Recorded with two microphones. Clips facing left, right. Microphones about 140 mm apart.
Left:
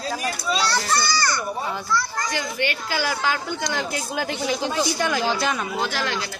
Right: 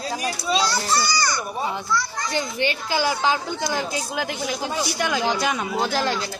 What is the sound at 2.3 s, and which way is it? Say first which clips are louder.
A child's voice: right 5 dB; 25° right (ahead or behind).